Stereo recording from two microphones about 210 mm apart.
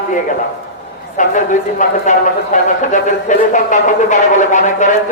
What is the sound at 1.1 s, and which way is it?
A man's voice, 35° left (ahead or behind).